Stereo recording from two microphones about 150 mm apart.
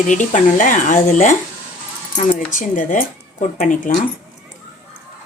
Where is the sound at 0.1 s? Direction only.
55° left (ahead or behind).